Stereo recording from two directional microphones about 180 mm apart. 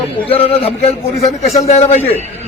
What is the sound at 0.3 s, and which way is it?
Speech, 35° left (ahead or behind).